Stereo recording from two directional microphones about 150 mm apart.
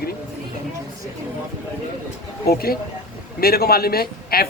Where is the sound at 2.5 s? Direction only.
90° left.